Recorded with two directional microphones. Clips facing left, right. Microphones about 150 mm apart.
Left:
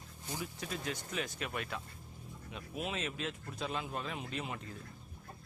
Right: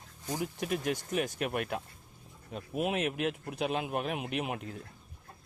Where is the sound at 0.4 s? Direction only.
60° right (ahead or behind).